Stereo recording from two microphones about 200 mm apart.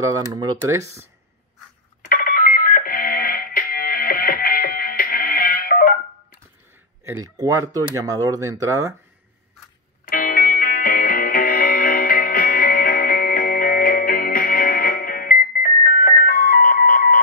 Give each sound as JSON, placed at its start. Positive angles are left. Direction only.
{"t": 0.0, "sound": "speech", "side_deg": -20}
{"t": 2.0, "sound": "music", "side_deg": 45}
{"t": 7.1, "sound": "speech", "side_deg": -15}
{"t": 10.1, "sound": "music", "side_deg": 45}